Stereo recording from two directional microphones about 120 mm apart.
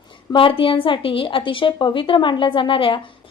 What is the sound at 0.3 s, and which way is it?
A woman's voice, 45° left (ahead or behind).